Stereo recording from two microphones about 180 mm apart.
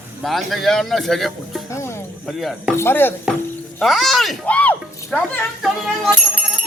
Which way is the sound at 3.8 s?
Centre (ahead or behind).